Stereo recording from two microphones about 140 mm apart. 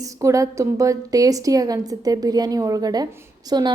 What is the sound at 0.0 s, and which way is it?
A woman's voice, 25° right (ahead or behind).